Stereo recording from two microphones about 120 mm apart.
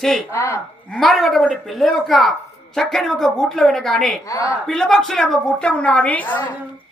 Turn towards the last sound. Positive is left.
turn(degrees=15)  # may be behind; listen again after turning